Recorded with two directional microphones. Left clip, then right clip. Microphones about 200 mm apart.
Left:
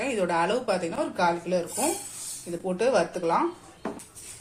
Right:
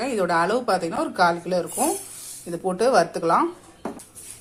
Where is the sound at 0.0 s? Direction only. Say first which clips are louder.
Right 4 dB; 25° right (ahead or behind).